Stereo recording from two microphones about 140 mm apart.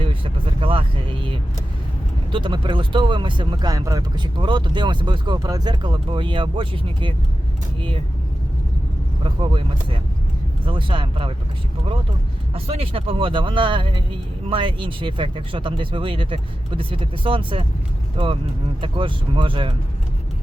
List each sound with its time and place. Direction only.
0.0 s speech: 40° right (ahead or behind)
9.2 s speech: 40° right (ahead or behind)
12.5 s speech: 45° right (ahead or behind)